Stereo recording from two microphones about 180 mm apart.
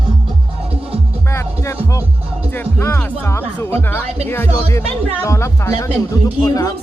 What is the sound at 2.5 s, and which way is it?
Speech, 10° left (ahead or behind).